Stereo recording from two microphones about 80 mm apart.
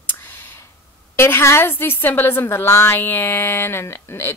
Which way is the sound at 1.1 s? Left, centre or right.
Left.